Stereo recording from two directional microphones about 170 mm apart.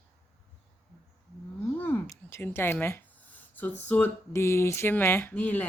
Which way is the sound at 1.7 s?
10° left (ahead or behind).